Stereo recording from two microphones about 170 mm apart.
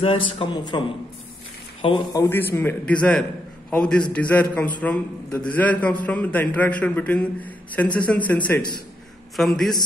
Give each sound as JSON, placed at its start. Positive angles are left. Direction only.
{"t": 0.0, "sound": "a man's voice", "side_deg": 30}
{"t": 2.1, "sound": "a man's voice", "side_deg": 15}
{"t": 9.4, "sound": "a man's voice", "side_deg": 0}